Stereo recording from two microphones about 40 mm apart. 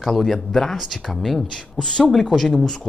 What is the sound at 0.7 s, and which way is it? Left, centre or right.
Speech, centre.